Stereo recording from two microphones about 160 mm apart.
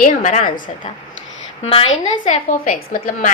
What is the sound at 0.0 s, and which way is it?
Speech, 50° left (ahead or behind).